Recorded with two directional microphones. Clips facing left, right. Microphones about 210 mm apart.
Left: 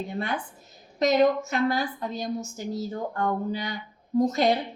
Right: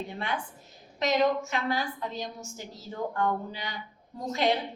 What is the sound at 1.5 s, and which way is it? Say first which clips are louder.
A woman's voice: left 5 dB; 40° left (ahead or behind).